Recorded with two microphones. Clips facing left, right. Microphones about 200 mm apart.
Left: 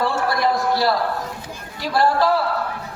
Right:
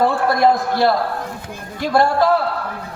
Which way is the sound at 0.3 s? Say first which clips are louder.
Right 4 dB; 50° right (ahead or behind).